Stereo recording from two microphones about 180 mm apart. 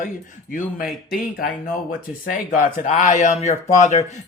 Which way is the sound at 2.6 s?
45° left (ahead or behind).